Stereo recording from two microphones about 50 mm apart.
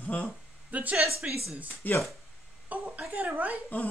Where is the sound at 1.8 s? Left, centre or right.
Left.